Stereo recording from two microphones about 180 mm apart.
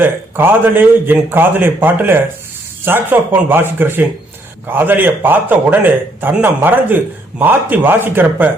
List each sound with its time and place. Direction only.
0.0 s speech: 10° right (ahead or behind)